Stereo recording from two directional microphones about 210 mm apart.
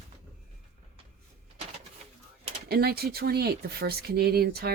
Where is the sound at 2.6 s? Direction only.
50° right (ahead or behind).